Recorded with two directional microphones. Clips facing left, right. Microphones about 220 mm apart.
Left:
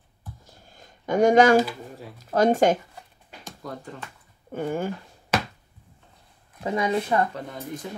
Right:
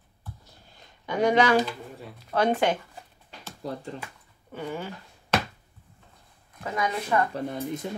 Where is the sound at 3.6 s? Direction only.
30° right (ahead or behind).